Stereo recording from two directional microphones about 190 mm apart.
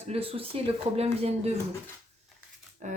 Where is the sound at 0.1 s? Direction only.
30° right (ahead or behind).